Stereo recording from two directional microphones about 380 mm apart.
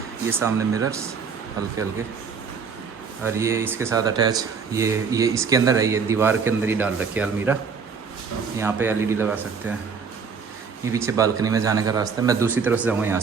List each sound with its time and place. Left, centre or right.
0.3 s speech: centre
3.2 s speech: centre
8.5 s speech: centre
10.9 s speech: centre